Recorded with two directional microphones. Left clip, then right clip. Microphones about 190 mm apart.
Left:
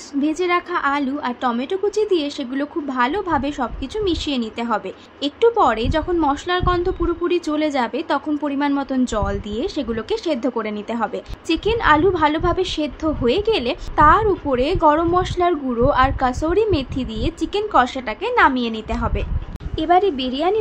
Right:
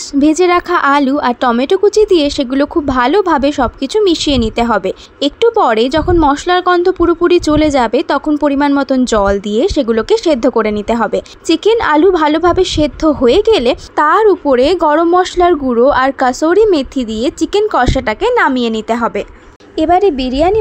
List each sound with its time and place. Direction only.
0.1 s a woman's voice: 50° right (ahead or behind)